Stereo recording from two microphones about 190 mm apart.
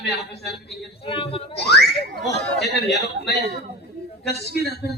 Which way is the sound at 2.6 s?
60° left (ahead or behind).